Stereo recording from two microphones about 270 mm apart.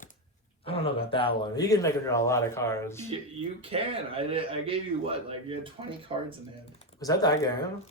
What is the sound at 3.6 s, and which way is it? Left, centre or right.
A man's voice, right.